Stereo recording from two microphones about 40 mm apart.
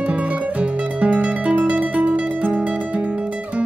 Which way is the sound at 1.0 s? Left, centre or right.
Right.